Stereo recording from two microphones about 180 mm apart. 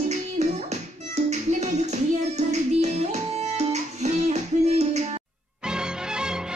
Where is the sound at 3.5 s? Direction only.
40° right (ahead or behind).